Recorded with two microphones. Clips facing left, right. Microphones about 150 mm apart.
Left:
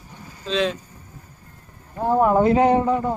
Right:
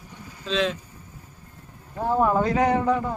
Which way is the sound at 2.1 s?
20° left (ahead or behind).